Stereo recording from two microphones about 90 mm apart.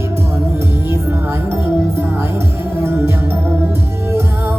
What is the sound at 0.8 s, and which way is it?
Music, 25° right (ahead or behind).